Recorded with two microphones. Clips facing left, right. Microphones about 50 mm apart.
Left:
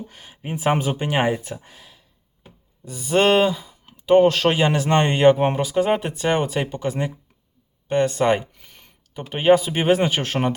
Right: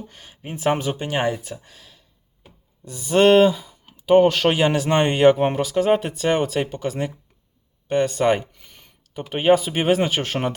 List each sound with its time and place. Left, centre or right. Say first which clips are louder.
0.1 s speech: left 4 dB; centre